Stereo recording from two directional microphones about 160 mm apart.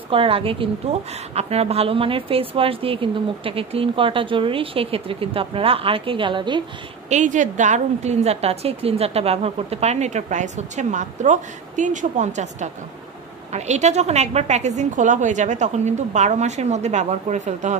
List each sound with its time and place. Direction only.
0.1 s a woman's voice: 35° right (ahead or behind)
7.1 s a woman's voice: 50° right (ahead or behind)